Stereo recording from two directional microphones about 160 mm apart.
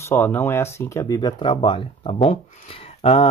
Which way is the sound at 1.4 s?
35° left (ahead or behind).